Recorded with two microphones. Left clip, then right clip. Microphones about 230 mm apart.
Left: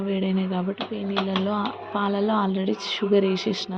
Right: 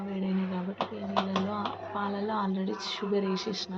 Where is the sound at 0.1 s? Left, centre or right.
Left.